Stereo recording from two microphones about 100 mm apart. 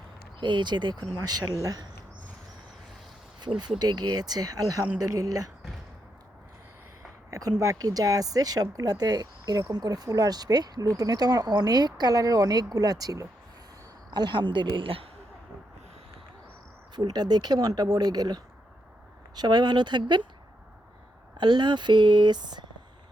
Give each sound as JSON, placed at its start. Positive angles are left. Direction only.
{"t": 0.3, "sound": "speech", "side_deg": -50}
{"t": 3.8, "sound": "speech", "side_deg": -45}
{"t": 7.3, "sound": "a sound", "side_deg": -35}
{"t": 7.6, "sound": "speech", "side_deg": -35}
{"t": 14.1, "sound": "speech", "side_deg": -50}
{"t": 14.8, "sound": "speech", "side_deg": -65}
{"t": 16.9, "sound": "speech", "side_deg": -45}
{"t": 19.4, "sound": "speech", "side_deg": -45}
{"t": 21.3, "sound": "speech", "side_deg": -50}